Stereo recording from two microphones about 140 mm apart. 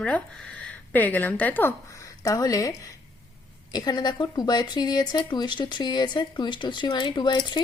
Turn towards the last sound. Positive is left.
turn(degrees=30)  # may be behind; listen again after turning